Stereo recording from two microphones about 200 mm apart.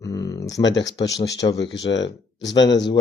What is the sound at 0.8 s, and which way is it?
Speech, 65° left (ahead or behind).